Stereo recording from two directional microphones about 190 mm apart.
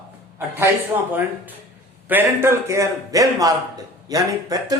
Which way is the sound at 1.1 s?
10° right (ahead or behind).